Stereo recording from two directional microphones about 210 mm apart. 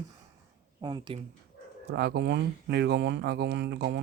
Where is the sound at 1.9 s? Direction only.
50° right (ahead or behind).